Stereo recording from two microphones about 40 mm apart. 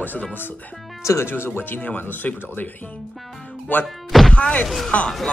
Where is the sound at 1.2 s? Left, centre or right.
Left.